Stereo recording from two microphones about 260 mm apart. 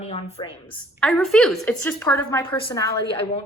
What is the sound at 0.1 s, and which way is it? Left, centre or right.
Speech, left.